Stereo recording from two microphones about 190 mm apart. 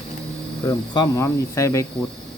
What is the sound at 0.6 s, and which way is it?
Speech, 20° left (ahead or behind).